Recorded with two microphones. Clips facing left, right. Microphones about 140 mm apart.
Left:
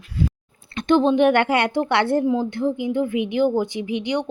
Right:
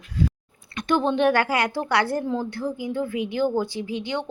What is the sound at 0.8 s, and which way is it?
Speech, 20° left (ahead or behind).